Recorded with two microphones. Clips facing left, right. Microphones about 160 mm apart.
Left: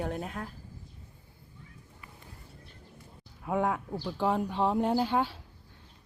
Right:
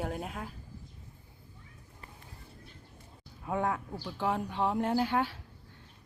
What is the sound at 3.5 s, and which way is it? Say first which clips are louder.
Speech: left 3 dB; 15° left (ahead or behind).